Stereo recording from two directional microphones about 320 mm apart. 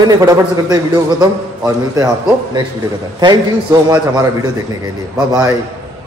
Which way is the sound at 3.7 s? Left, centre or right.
Centre.